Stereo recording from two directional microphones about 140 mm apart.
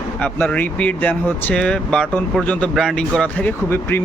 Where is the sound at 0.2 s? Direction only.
10° left (ahead or behind).